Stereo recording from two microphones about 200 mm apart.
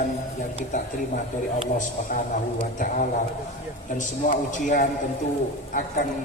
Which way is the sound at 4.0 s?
40° left (ahead or behind).